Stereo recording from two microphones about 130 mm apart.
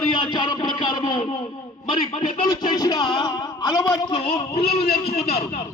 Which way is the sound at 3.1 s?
35° left (ahead or behind).